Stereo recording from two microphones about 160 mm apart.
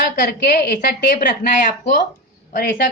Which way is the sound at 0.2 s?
75° left (ahead or behind).